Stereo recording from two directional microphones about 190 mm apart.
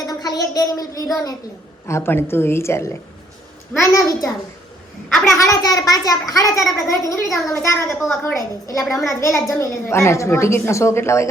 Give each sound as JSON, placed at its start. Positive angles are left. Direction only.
{"t": 0.1, "sound": "a woman's voice", "side_deg": 20}
{"t": 5.0, "sound": "a child's voice", "side_deg": 5}
{"t": 5.4, "sound": "a child's voice", "side_deg": 20}